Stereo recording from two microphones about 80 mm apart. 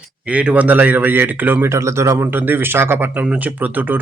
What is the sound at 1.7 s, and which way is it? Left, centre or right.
Speech, right.